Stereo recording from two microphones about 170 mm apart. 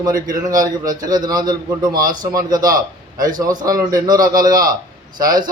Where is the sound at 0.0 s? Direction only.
20° right (ahead or behind).